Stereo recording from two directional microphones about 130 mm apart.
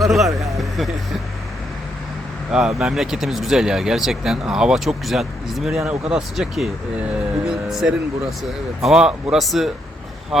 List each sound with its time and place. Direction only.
0.0 s speech: centre (ahead or behind)
0.4 s speech: 25° right (ahead or behind)
2.5 s speech: 5° right (ahead or behind)
7.4 s music: 5° right (ahead or behind)
8.8 s speech: 5° right (ahead or behind)